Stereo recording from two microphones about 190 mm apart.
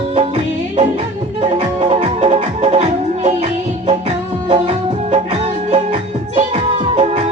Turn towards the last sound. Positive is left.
turn(degrees=-30)  # may be behind; listen again after turning